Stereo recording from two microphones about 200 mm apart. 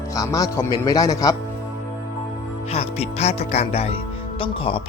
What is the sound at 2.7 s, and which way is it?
Speech, 30° left (ahead or behind).